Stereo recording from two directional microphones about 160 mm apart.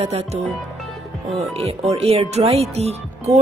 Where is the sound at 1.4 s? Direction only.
40° right (ahead or behind).